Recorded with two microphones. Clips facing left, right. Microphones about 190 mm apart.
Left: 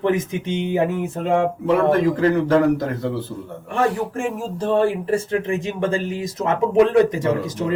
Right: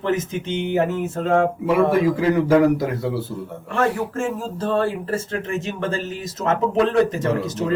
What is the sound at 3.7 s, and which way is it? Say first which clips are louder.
Speech: even; 15° left (ahead or behind).